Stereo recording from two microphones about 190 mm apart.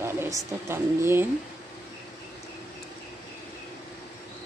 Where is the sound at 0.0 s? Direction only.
15° right (ahead or behind).